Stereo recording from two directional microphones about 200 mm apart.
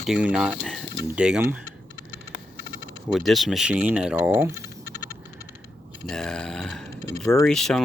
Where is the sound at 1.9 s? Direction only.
60° left (ahead or behind).